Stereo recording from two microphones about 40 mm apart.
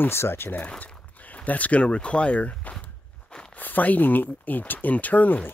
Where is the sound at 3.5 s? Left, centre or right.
Left.